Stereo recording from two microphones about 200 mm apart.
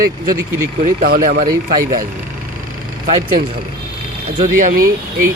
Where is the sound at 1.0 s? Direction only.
45° right (ahead or behind).